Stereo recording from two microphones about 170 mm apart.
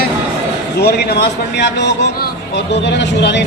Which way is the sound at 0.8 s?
75° left (ahead or behind).